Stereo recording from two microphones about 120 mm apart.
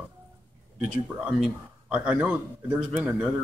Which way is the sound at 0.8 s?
5° right (ahead or behind).